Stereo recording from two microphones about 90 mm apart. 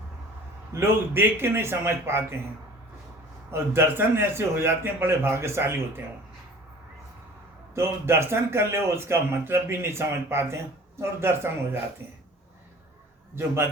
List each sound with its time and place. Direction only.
0.7 s a man's voice: 30° right (ahead or behind)
3.5 s a man's voice: 25° right (ahead or behind)
7.8 s a man's voice: 30° right (ahead or behind)